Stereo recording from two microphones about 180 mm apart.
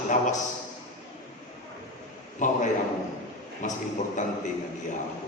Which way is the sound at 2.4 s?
45° left (ahead or behind).